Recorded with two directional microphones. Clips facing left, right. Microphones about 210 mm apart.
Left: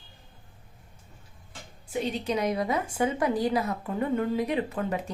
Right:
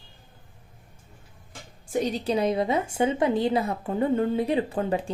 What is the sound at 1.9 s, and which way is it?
A woman's voice, 40° right (ahead or behind).